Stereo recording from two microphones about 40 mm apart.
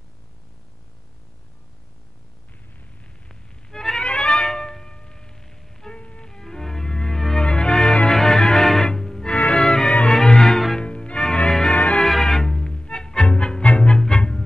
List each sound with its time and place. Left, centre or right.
3.3 s music: centre
5.9 s music: left
6.4 s music: centre
10.8 s music: left
11.7 s music: left
12.0 s music: centre